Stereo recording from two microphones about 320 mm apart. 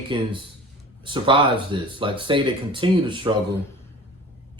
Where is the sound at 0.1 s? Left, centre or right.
Centre.